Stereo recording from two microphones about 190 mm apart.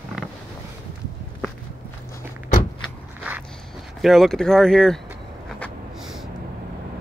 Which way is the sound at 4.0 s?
Centre (ahead or behind).